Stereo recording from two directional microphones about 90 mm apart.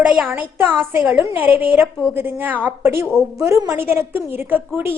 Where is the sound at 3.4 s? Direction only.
35° right (ahead or behind).